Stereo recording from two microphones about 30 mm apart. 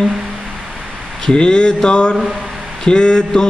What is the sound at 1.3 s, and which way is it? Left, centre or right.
Mantra, left.